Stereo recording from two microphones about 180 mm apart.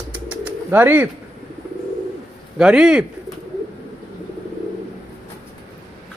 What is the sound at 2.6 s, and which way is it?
Speech, 5° right (ahead or behind).